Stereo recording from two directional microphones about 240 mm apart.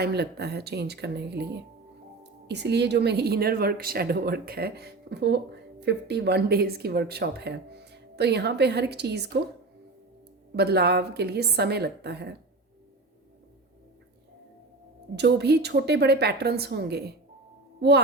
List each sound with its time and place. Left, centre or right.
0.0 s speech: right
2.5 s a woman's voice: right
10.5 s speech: right
15.1 s speech: right